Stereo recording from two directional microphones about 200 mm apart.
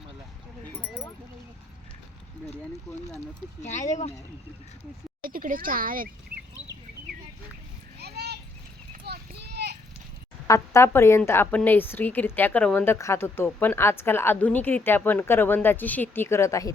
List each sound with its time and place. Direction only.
3.6 s speech: 35° left (ahead or behind)
5.2 s a child's voice: 45° right (ahead or behind)
7.9 s children playing: 55° right (ahead or behind)
9.0 s clip-clop: 55° right (ahead or behind)
10.4 s a woman's voice: 15° left (ahead or behind)